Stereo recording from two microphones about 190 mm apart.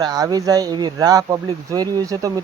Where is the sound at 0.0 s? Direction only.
20° right (ahead or behind).